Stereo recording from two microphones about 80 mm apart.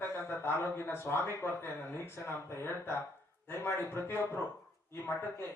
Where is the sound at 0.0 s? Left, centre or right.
Left.